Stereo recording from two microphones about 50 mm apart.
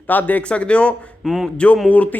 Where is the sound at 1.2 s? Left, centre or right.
Centre.